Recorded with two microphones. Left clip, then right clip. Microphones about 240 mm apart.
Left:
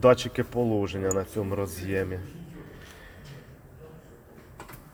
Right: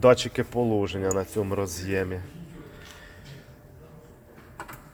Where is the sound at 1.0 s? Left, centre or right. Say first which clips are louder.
Right 1 dB; centre.